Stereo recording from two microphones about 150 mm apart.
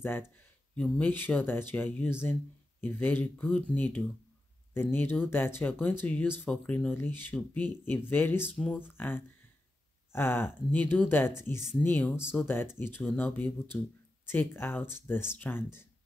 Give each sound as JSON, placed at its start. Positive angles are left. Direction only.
{"t": 0.7, "sound": "speech", "side_deg": 10}